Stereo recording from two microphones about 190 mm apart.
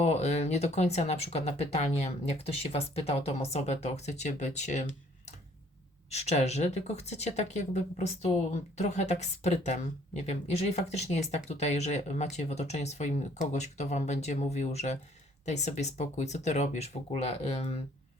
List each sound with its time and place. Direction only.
0.0 s speech: 35° left (ahead or behind)
6.1 s speech: 35° left (ahead or behind)